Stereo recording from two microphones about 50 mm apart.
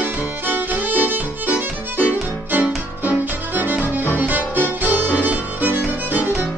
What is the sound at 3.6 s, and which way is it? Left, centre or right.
Music, right.